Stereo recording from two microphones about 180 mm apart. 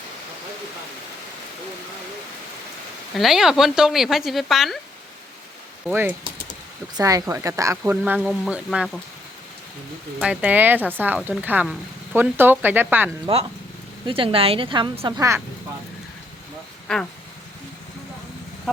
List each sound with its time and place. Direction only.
3.2 s speech: centre (ahead or behind)
5.9 s speech: 10° right (ahead or behind)
10.2 s speech: 5° right (ahead or behind)
13.3 s a woman's voice: 30° right (ahead or behind)
16.9 s speech: 5° left (ahead or behind)